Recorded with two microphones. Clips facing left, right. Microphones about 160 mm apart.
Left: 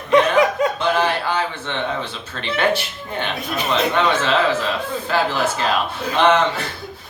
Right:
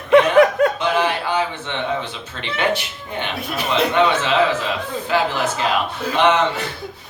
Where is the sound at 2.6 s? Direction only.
15° right (ahead or behind).